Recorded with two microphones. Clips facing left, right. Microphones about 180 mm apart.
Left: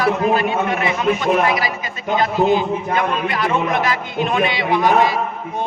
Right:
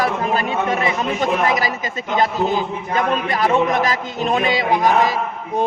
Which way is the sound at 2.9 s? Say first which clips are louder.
Right 4 dB; 40° right (ahead or behind).